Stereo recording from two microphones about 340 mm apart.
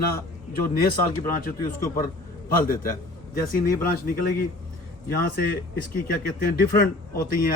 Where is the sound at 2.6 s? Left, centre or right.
Left.